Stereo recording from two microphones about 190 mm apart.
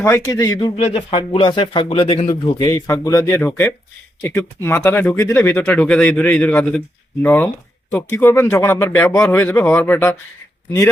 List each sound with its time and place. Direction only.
0.0 s speech: 15° left (ahead or behind)
0.8 s speech: 35° left (ahead or behind); by 10.2 s 15° left (ahead or behind)